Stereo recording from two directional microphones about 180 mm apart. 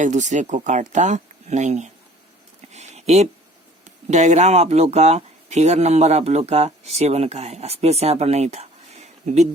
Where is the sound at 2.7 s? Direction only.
35° right (ahead or behind).